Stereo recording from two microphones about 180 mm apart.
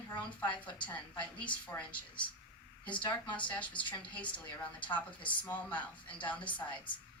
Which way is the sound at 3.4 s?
5° left (ahead or behind).